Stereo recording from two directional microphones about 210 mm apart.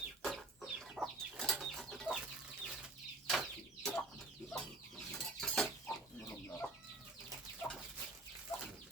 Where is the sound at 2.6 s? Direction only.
Centre (ahead or behind).